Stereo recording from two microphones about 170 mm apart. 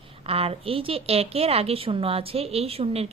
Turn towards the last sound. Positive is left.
turn(degrees=-35)  # may be behind; listen again after turning